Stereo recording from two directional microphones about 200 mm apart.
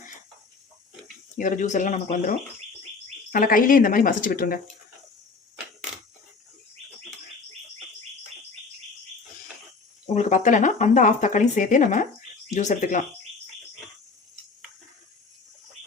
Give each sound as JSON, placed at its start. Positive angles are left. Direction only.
{"t": 1.4, "sound": "speech", "side_deg": 40}
{"t": 3.3, "sound": "speech", "side_deg": 45}
{"t": 10.1, "sound": "speech", "side_deg": 35}